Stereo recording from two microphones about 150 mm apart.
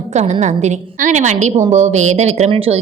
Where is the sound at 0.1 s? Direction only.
50° right (ahead or behind).